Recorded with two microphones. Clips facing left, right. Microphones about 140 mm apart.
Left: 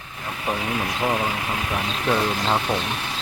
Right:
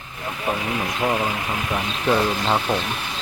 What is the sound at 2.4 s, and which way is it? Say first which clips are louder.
Speech: right 1 dB; 5° right (ahead or behind).